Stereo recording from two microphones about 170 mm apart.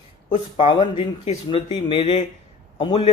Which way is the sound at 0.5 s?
30° left (ahead or behind).